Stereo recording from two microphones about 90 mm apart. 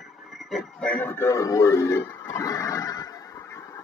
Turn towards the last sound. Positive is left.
turn(degrees=40)  # may be behind; listen again after turning